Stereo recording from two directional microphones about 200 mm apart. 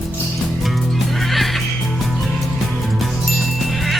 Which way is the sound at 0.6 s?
Centre (ahead or behind).